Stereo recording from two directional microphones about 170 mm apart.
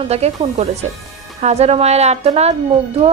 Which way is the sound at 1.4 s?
40° right (ahead or behind).